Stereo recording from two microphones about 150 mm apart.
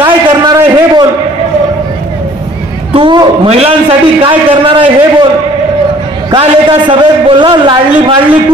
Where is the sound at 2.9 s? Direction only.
35° right (ahead or behind).